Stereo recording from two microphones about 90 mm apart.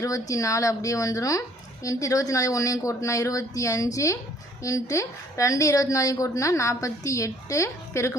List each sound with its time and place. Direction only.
0.0 s a woman's voice: 35° left (ahead or behind)